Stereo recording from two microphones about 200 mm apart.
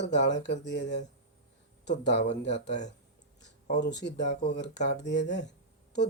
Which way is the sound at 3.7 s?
60° left (ahead or behind).